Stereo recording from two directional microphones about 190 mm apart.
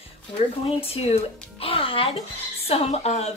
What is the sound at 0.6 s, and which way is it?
A woman's voice, 30° left (ahead or behind).